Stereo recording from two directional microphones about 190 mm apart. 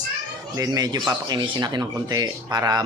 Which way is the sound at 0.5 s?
20° right (ahead or behind).